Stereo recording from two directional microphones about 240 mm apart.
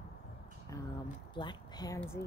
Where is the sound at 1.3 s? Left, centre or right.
Centre.